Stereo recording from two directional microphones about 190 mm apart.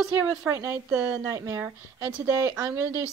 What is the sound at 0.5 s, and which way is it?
Speech, 15° right (ahead or behind).